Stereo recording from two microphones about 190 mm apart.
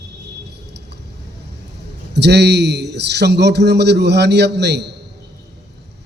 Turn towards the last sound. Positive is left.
turn(degrees=-60)  # may be behind; listen again after turning